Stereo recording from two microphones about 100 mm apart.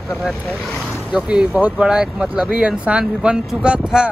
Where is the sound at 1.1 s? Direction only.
10° right (ahead or behind).